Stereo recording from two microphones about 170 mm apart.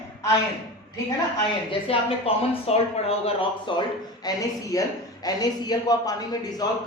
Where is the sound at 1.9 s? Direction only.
35° left (ahead or behind).